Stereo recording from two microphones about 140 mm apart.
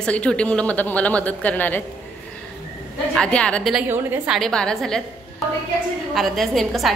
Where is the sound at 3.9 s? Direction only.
15° right (ahead or behind).